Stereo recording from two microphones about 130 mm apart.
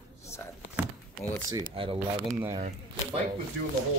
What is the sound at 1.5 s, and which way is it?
Speech, 40° right (ahead or behind).